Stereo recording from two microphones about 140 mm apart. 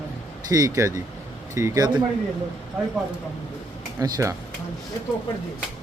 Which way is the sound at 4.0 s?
25° right (ahead or behind).